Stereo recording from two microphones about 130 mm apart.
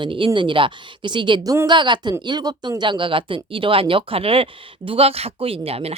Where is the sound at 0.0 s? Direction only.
40° right (ahead or behind).